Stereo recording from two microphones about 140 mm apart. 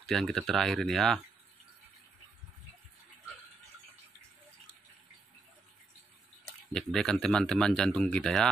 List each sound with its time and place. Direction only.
0.0 s speech: centre (ahead or behind)
6.7 s speech: 5° left (ahead or behind)